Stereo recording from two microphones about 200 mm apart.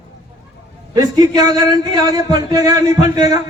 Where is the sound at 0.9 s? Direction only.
20° right (ahead or behind).